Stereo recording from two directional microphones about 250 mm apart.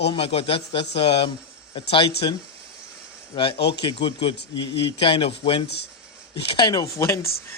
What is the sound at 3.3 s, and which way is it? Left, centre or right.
A man's voice, centre.